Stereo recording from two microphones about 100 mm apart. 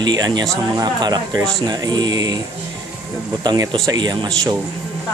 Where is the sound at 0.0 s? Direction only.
45° right (ahead or behind).